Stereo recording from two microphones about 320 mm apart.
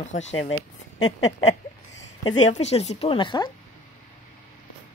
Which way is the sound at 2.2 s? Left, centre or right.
Centre.